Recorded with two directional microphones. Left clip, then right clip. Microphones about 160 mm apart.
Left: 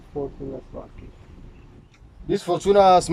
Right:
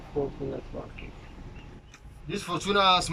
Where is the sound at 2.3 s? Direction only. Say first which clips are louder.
Left 9 dB; 50° left (ahead or behind).